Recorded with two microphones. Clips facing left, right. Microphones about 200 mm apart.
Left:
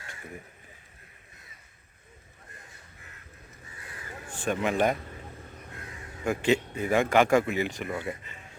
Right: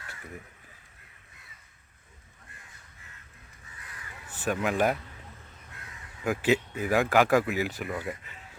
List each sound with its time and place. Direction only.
3.8 s crow: 30° left (ahead or behind)
4.4 s speech: 5° right (ahead or behind)
6.2 s speech: 5° right (ahead or behind)